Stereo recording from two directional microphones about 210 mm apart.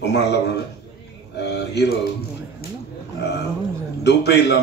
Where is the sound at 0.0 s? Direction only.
55° left (ahead or behind).